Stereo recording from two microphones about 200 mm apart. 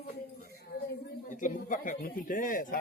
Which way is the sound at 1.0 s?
40° left (ahead or behind).